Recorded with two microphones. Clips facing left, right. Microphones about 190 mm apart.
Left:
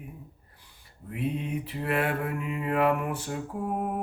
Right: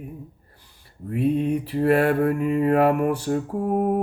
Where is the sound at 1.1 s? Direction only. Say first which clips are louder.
Right 9 dB; 40° right (ahead or behind).